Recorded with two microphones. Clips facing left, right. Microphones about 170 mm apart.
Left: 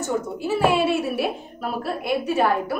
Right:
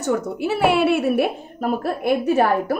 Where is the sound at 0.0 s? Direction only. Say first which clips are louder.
Right 3 dB; 65° right (ahead or behind); by 2.5 s 50° right (ahead or behind).